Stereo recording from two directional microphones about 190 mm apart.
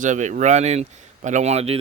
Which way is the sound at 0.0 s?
40° right (ahead or behind).